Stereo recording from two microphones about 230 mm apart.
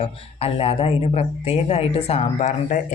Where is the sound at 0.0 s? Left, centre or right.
Left.